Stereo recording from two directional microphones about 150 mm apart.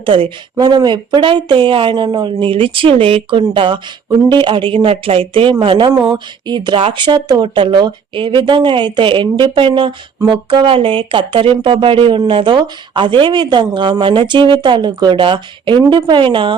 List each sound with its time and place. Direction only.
0.0 s speech: 35° right (ahead or behind)